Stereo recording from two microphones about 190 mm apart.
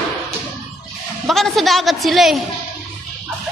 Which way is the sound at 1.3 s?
Centre (ahead or behind).